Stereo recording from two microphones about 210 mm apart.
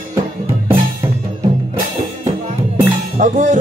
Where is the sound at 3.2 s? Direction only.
35° right (ahead or behind).